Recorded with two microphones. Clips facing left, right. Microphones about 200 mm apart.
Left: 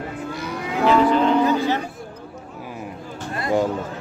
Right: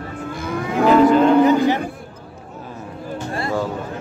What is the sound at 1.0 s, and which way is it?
Cattle, 45° right (ahead or behind).